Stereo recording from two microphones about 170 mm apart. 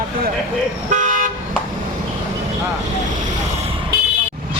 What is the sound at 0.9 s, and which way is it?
Toot, 50° right (ahead or behind).